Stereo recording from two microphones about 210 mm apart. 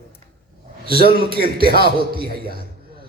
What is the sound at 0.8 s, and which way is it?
A man's voice, 45° right (ahead or behind).